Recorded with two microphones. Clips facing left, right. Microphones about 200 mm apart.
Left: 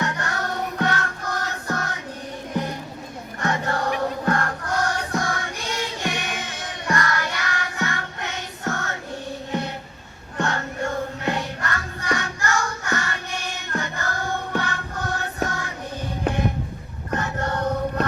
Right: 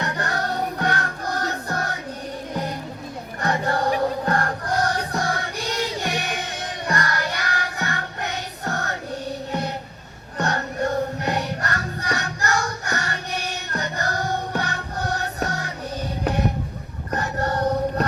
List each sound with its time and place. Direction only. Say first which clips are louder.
0.0 s music: right 1 dB; 35° right (ahead or behind)
3.4 s music: right 2 dB; 35° right (ahead or behind)
17.1 s music: right 1 dB; 35° right (ahead or behind)